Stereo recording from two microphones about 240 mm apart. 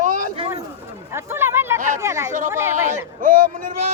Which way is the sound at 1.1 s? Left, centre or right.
Centre.